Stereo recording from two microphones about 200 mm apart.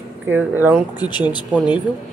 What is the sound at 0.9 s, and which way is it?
Speech, 20° left (ahead or behind).